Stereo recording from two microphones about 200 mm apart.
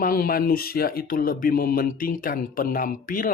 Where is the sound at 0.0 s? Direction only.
45° left (ahead or behind).